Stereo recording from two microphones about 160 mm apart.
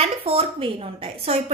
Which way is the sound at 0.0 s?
35° right (ahead or behind).